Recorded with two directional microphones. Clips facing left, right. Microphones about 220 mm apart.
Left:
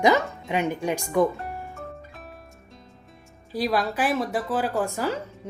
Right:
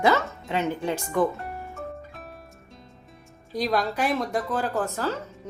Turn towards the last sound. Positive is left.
turn(degrees=10)  # may be behind; listen again after turning